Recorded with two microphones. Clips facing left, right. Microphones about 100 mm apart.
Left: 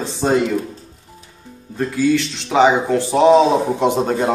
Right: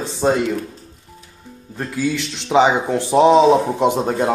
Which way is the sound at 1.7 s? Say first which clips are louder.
Left 5 dB; 15° right (ahead or behind).